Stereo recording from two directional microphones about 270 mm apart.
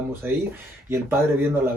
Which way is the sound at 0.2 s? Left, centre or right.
Centre.